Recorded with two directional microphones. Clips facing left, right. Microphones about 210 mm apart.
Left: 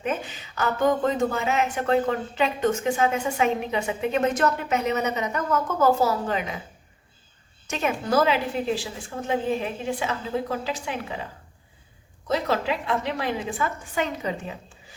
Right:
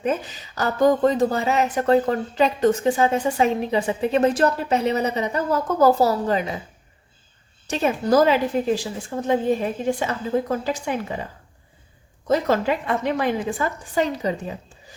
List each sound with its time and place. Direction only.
0.0 s speech: 40° right (ahead or behind)
7.7 s a woman's voice: 35° right (ahead or behind)
12.3 s a woman's voice: 45° right (ahead or behind)